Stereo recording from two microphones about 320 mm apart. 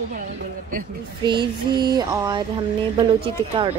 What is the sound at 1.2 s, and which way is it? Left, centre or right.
A woman's voice, centre.